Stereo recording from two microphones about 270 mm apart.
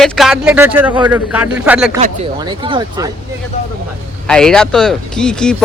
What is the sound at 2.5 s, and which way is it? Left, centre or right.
Speech, centre.